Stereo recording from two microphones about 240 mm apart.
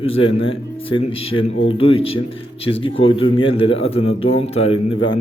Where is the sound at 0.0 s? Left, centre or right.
Left.